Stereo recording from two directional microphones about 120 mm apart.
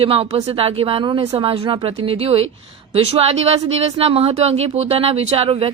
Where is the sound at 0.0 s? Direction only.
50° right (ahead or behind).